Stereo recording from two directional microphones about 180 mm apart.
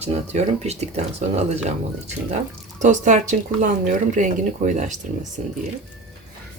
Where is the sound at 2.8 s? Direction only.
45° right (ahead or behind).